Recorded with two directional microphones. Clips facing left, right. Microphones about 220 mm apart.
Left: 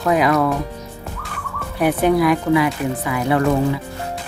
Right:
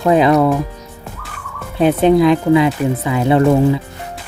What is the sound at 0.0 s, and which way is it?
Speech, 30° right (ahead or behind).